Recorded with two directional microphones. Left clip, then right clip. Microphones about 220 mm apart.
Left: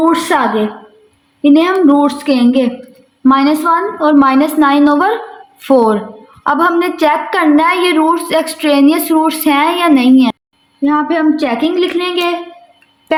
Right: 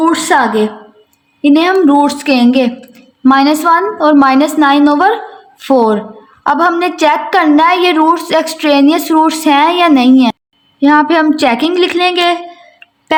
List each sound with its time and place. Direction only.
0.0 s a woman's voice: 15° right (ahead or behind)
10.8 s a woman's voice: 35° right (ahead or behind)